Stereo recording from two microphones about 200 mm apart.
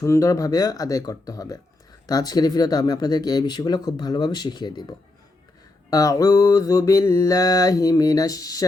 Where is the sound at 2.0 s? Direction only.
20° left (ahead or behind).